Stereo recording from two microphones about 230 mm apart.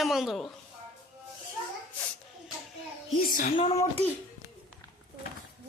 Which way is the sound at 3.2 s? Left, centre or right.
Left.